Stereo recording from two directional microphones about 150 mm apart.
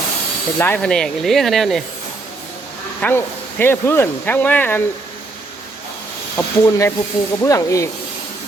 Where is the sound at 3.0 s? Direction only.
15° left (ahead or behind).